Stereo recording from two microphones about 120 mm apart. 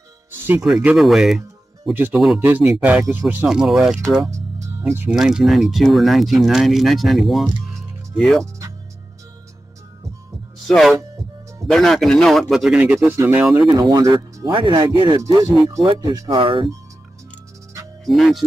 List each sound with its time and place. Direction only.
0.4 s music: 20° right (ahead or behind)
0.8 s speech: 5° right (ahead or behind)
2.4 s speech: 15° right (ahead or behind)
4.2 s music: 25° right (ahead or behind)
5.1 s speech: 5° right (ahead or behind)
10.7 s speech: centre (ahead or behind)
13.7 s speech: 35° right (ahead or behind)
15.1 s speech: 30° right (ahead or behind)
16.3 s speech: 45° right (ahead or behind)
18.0 s speech: centre (ahead or behind)